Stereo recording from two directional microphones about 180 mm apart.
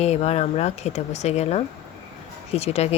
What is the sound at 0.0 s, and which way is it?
Speech, 35° left (ahead or behind).